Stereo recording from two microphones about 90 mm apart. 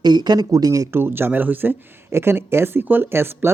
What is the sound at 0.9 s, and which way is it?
Speech, 25° right (ahead or behind).